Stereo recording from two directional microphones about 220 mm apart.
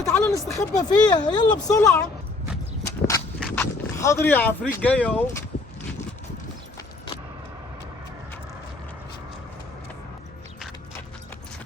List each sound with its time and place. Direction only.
0.0 s speech: 15° left (ahead or behind)
3.5 s speech: 10° left (ahead or behind)